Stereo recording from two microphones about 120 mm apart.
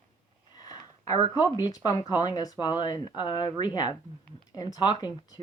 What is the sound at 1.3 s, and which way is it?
Speech, 35° left (ahead or behind).